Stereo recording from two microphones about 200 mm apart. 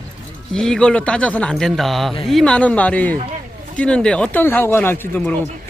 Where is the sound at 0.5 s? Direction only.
5° left (ahead or behind).